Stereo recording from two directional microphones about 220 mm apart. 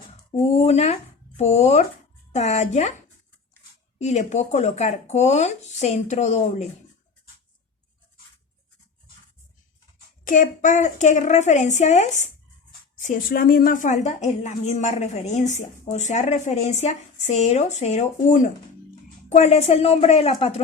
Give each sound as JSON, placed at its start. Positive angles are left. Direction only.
{"t": 0.3, "sound": "a woman's voice", "side_deg": 25}
{"t": 4.0, "sound": "a woman's voice", "side_deg": 30}
{"t": 10.2, "sound": "a woman's voice", "side_deg": 35}